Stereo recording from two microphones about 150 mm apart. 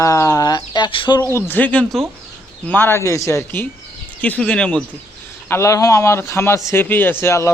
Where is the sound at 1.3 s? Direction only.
15° left (ahead or behind).